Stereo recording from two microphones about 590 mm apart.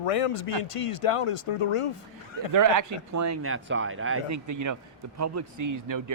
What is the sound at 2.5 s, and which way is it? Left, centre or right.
Speech, right.